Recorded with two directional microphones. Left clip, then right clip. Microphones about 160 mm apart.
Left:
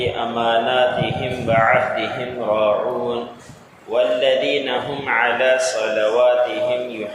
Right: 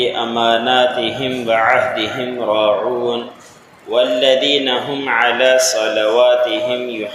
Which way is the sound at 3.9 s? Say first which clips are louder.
Right 3 dB; 35° right (ahead or behind).